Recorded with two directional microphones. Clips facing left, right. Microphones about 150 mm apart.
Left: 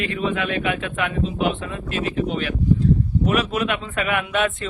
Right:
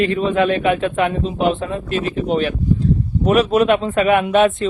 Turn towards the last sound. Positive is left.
turn(degrees=-30)  # may be behind; listen again after turning